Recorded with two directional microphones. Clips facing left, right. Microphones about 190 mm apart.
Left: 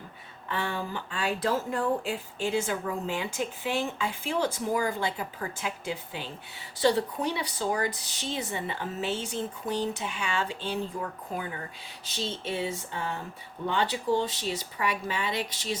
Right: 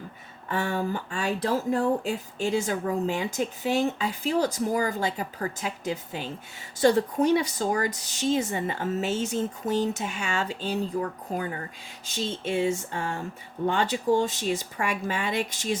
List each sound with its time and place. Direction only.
0.5 s speech: 45° right (ahead or behind)
12.0 s speech: 50° right (ahead or behind)